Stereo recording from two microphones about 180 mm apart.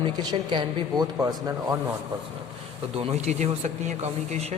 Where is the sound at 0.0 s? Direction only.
25° right (ahead or behind).